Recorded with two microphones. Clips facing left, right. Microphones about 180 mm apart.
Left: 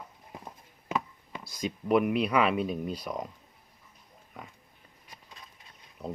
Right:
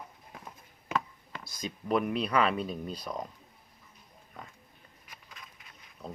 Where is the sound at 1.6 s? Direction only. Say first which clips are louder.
Left 4 dB; 10° left (ahead or behind).